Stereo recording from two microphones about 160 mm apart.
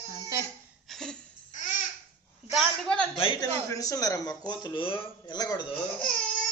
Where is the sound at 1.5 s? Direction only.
50° left (ahead or behind).